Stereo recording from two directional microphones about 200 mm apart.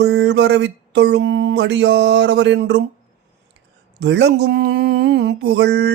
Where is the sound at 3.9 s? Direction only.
60° right (ahead or behind).